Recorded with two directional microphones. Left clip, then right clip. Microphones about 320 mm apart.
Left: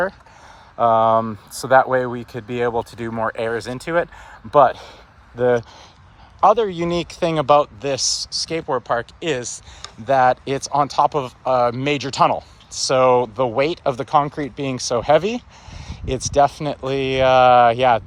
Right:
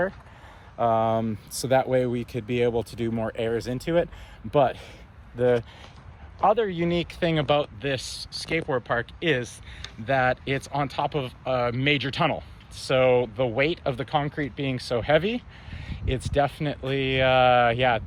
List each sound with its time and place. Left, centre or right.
0.8 s speech: left
16.4 s speech: centre